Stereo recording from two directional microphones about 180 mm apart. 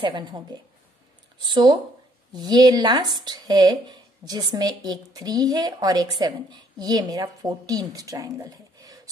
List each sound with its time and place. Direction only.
0.0 s speech: 25° right (ahead or behind)